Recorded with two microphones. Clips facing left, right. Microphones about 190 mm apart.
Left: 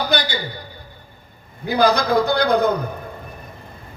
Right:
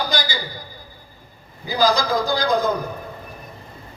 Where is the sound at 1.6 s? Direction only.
65° left (ahead or behind).